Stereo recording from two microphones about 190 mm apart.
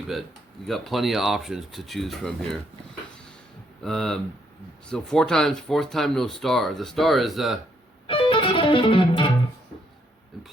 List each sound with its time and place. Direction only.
0.7 s speech: centre (ahead or behind)
3.8 s speech: 5° left (ahead or behind)
8.0 s music: 25° left (ahead or behind)